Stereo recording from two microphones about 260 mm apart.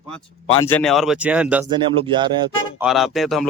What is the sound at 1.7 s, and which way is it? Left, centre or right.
Speech, centre.